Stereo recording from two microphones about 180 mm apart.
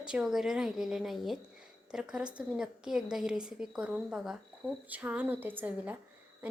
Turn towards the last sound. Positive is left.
turn(degrees=-10)  # may be behind; listen again after turning